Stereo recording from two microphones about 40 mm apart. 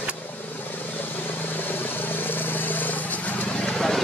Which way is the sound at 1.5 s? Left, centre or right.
Left.